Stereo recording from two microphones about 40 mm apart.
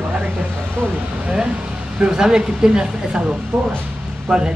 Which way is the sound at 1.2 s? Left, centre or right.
Right.